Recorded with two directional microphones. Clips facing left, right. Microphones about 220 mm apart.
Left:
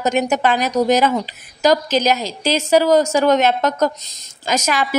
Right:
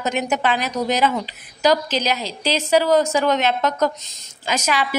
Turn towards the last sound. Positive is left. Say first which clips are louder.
# left 2 dB
turn(degrees=45)  # may be behind; listen again after turning